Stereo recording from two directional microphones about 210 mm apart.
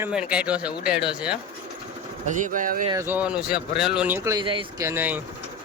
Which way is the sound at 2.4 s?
40° right (ahead or behind).